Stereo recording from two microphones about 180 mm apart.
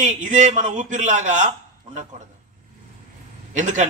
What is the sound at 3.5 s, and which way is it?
Speech, 40° right (ahead or behind).